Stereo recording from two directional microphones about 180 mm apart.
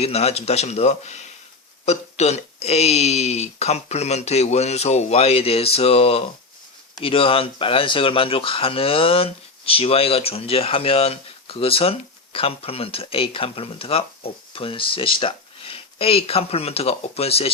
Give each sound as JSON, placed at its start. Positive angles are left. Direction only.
{"t": 0.0, "sound": "speech", "side_deg": 35}